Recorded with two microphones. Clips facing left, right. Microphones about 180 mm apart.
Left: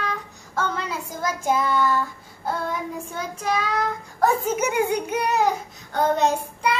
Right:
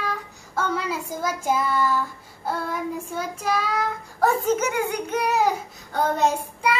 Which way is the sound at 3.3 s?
5° right (ahead or behind).